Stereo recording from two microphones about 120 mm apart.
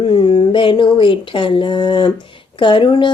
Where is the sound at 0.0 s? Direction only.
45° left (ahead or behind).